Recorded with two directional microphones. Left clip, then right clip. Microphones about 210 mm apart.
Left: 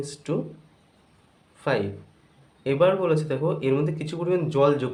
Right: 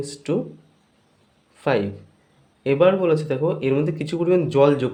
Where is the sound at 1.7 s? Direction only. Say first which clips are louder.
Right 4 dB; 25° right (ahead or behind).